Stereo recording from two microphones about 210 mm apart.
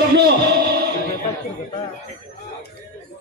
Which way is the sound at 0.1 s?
50° right (ahead or behind).